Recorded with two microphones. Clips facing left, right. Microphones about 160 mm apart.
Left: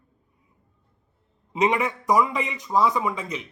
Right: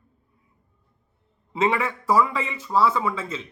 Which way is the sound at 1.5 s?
20° left (ahead or behind).